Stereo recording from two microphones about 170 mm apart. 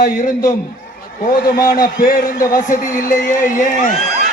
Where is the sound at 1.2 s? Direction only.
55° left (ahead or behind).